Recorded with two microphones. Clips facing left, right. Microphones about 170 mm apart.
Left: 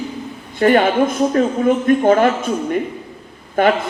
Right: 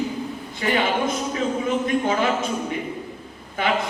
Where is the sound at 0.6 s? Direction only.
50° left (ahead or behind).